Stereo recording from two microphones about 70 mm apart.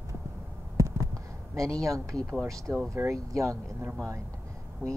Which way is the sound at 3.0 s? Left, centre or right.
Right.